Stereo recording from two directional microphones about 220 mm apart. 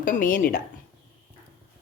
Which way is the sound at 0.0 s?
40° left (ahead or behind).